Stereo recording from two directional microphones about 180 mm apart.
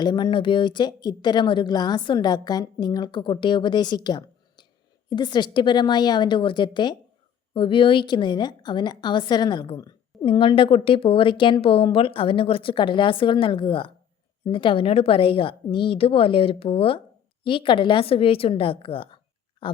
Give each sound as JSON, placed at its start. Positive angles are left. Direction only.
{"t": 0.0, "sound": "a woman's voice", "side_deg": 25}